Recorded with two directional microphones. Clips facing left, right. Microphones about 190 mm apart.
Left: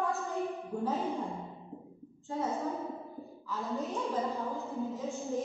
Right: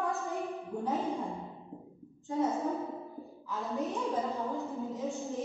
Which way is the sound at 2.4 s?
Centre (ahead or behind).